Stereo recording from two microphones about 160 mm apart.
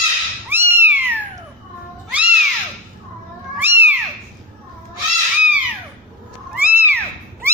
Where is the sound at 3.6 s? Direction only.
15° right (ahead or behind).